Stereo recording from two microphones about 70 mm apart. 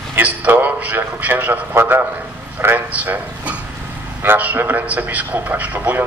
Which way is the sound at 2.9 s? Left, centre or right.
Centre.